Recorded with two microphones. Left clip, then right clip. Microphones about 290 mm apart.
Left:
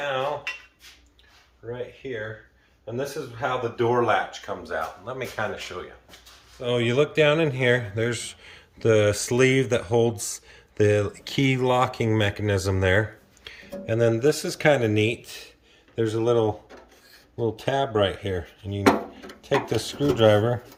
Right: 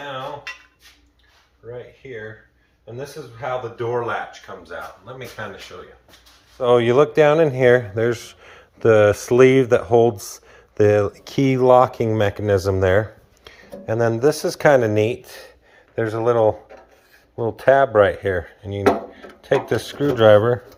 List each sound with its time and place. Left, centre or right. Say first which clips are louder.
3.0 s speech: left 1 dB; left
6.6 s speech: right 8 dB; centre
17.6 s speech: right 11 dB; centre